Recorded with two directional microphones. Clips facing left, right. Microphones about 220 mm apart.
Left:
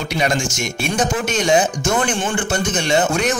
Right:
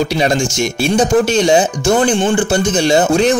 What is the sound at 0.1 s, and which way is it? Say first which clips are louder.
Speech: right 5 dB; 35° right (ahead or behind).